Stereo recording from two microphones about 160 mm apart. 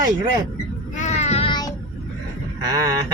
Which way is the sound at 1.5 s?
25° left (ahead or behind).